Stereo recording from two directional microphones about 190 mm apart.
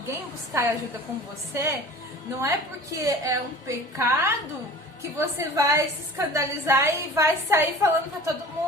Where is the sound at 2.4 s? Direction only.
15° right (ahead or behind).